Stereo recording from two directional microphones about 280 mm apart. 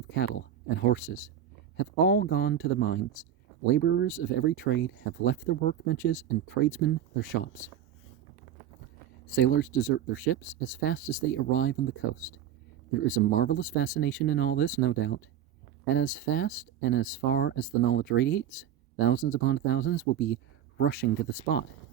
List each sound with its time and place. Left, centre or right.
0.8 s speech: left
9.3 s speech: left